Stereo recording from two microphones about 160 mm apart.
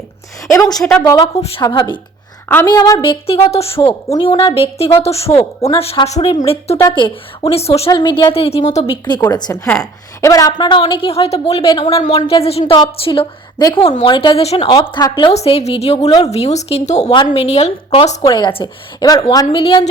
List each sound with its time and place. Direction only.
0.5 s a woman's voice: 25° left (ahead or behind)
0.8 s speech: 5° left (ahead or behind)
1.0 s a woman's voice: 25° left (ahead or behind)
1.4 s a woman's voice: 35° left (ahead or behind)
15.3 s a woman's voice: 40° left (ahead or behind)
18.2 s a woman's voice: 30° left (ahead or behind)